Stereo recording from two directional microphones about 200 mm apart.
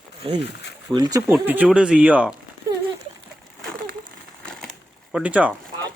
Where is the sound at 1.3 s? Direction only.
10° right (ahead or behind).